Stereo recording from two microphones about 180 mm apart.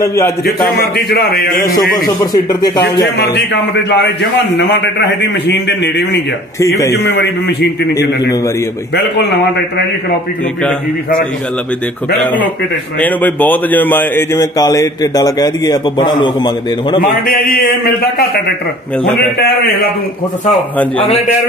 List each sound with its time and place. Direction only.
0.0 s a man's voice: 15° left (ahead or behind)
0.9 s a man's voice: 60° left (ahead or behind)
2.3 s a man's voice: 20° left (ahead or behind)
2.8 s a man's voice: 70° left (ahead or behind)
6.6 s a man's voice: 15° left (ahead or behind)
13.0 s a man's voice: 10° left (ahead or behind); by 17.0 s 25° left (ahead or behind)
17.0 s a man's voice: 55° left (ahead or behind)